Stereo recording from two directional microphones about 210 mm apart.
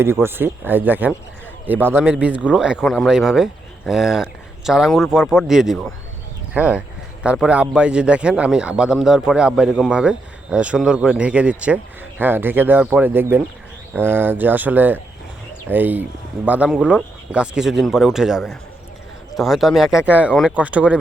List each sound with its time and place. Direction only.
0.0 s a man's voice: 10° right (ahead or behind)